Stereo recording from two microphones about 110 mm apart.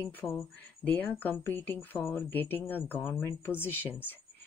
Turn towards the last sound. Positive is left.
turn(degrees=15)  # may be behind; listen again after turning